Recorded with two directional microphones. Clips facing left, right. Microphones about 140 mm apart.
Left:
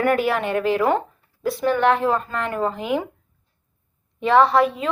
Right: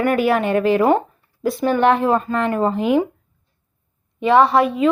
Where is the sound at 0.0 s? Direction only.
10° right (ahead or behind).